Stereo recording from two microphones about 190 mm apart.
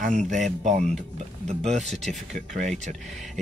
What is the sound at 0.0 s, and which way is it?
Speech, 40° right (ahead or behind).